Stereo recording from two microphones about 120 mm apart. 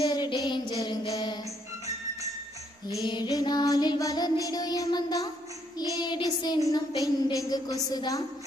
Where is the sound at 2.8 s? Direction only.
40° left (ahead or behind).